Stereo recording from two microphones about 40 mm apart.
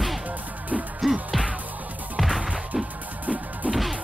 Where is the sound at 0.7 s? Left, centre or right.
Right.